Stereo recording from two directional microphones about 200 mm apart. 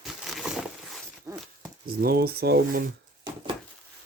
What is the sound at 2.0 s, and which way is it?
Speech, 50° right (ahead or behind).